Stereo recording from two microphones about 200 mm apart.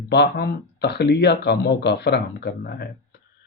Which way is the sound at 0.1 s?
55° left (ahead or behind).